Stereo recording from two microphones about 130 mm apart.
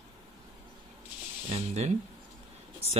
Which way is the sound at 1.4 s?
55° right (ahead or behind).